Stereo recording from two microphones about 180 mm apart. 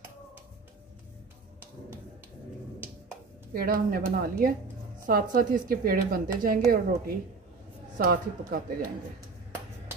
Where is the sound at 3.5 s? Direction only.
55° right (ahead or behind).